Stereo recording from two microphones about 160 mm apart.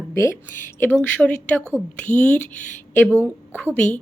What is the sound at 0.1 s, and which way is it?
Speech, 15° left (ahead or behind).